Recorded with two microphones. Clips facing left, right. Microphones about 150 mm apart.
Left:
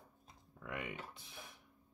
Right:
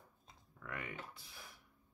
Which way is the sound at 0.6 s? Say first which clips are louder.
Left 2 dB; 20° left (ahead or behind).